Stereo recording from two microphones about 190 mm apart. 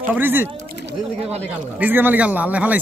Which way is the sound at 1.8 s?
10° right (ahead or behind).